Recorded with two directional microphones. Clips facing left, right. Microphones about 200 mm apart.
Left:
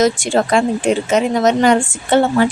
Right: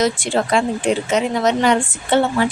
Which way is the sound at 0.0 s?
45° left (ahead or behind).